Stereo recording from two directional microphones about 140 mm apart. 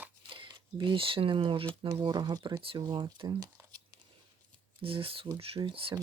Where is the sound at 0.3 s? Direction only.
35° right (ahead or behind).